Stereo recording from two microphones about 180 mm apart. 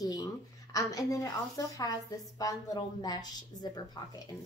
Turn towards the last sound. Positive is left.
turn(degrees=20)  # may be behind; listen again after turning